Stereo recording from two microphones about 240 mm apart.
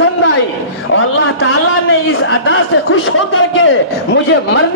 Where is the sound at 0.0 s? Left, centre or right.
Left.